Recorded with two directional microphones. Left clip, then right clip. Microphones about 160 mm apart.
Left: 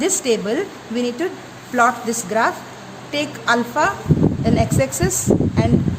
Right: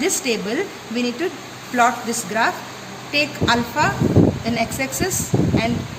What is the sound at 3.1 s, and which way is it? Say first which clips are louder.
A woman's voice: even; 75° left (ahead or behind).